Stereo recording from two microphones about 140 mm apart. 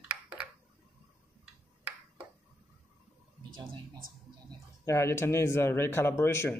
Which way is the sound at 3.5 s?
35° right (ahead or behind).